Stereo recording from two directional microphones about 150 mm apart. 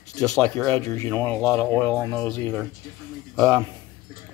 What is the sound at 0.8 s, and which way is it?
Speech, 20° left (ahead or behind).